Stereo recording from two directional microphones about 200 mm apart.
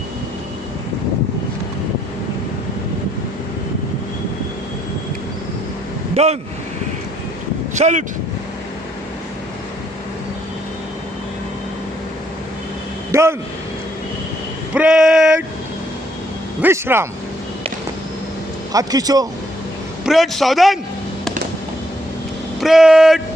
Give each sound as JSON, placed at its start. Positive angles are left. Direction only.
{"t": 7.7, "sound": "speech", "side_deg": -35}
{"t": 13.1, "sound": "speech", "side_deg": -15}
{"t": 14.7, "sound": "a sound", "side_deg": -5}
{"t": 16.6, "sound": "a man's voice", "side_deg": -10}
{"t": 18.7, "sound": "a man's voice", "side_deg": -20}
{"t": 20.1, "sound": "a man's voice", "side_deg": 0}
{"t": 22.6, "sound": "speech", "side_deg": 0}